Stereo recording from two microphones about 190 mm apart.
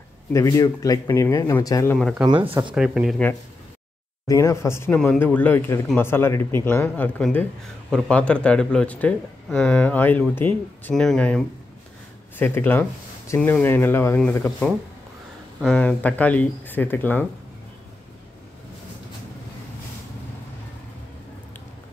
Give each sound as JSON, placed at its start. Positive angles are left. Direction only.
{"t": 0.3, "sound": "a man's voice", "side_deg": 15}
{"t": 2.0, "sound": "speech", "side_deg": 0}
{"t": 2.2, "sound": "speech", "side_deg": -25}
{"t": 2.7, "sound": "speech", "side_deg": -5}
{"t": 4.3, "sound": "a man's voice", "side_deg": 15}